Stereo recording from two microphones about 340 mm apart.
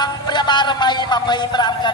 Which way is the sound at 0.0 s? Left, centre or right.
Centre.